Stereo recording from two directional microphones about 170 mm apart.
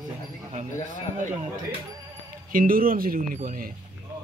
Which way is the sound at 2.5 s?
55° right (ahead or behind).